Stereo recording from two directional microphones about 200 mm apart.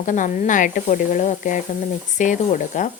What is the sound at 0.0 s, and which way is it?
Speech, 40° left (ahead or behind).